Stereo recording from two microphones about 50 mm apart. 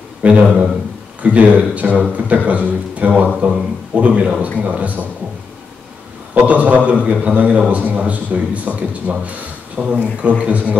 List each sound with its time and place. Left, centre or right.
0.2 s a man's voice: right
6.3 s a man's voice: right